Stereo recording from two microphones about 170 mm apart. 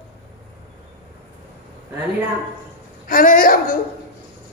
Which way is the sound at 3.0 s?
55° left (ahead or behind).